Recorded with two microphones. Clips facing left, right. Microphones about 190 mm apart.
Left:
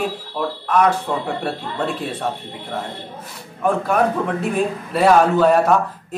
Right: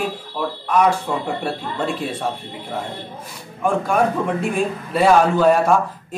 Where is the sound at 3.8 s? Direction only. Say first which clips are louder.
Even; 5° left (ahead or behind).